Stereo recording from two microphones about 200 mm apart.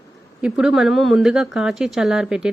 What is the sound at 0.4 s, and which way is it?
A woman's voice, 5° right (ahead or behind).